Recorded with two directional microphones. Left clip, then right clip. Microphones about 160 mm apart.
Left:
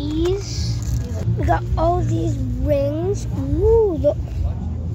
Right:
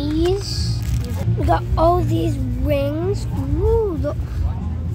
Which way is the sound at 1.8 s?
15° right (ahead or behind).